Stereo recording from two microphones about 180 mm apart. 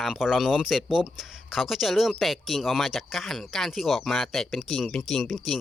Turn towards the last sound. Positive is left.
turn(degrees=0)  # may be behind; listen again after turning